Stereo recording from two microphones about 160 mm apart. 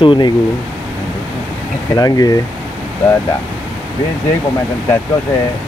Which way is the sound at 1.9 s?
20° left (ahead or behind).